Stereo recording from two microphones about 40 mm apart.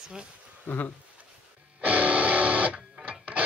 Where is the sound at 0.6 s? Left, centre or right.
Left.